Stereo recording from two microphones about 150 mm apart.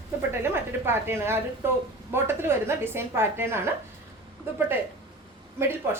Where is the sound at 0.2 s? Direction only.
15° right (ahead or behind).